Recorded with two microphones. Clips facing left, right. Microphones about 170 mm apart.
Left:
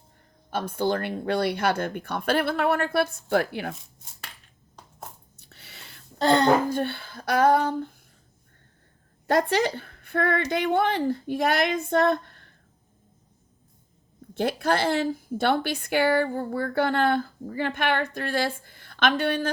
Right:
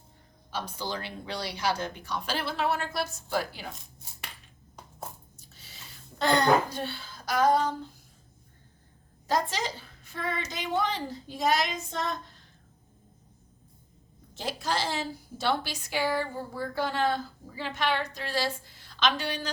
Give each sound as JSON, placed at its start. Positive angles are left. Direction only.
{"t": 0.5, "sound": "a woman's voice", "side_deg": 55}
{"t": 5.4, "sound": "a sound", "side_deg": 65}
{"t": 6.1, "sound": "a child's voice", "side_deg": 30}
{"t": 6.7, "sound": "a woman's voice", "side_deg": 55}
{"t": 9.2, "sound": "a woman's voice", "side_deg": 60}
{"t": 14.3, "sound": "a woman's voice", "side_deg": 60}